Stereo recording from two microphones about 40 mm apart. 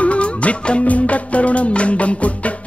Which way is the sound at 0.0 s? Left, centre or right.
Left.